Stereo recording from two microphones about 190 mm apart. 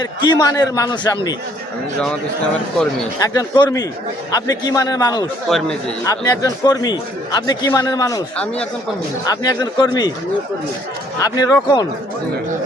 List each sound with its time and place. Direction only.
0.0 s a man's voice: 20° left (ahead or behind)
3.2 s a man's voice: 20° left (ahead or behind)
5.5 s speech: centre (ahead or behind)
6.1 s a man's voice: 20° left (ahead or behind)
9.2 s a man's voice: 20° left (ahead or behind)
11.2 s a man's voice: 15° left (ahead or behind)